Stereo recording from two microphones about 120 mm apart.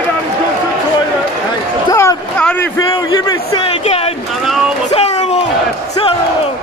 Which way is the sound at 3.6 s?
55° left (ahead or behind).